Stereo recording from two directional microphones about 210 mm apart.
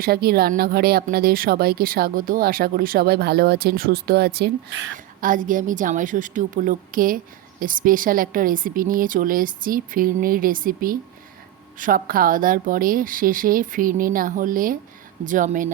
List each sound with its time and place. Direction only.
0.0 s a woman's voice: 45° right (ahead or behind)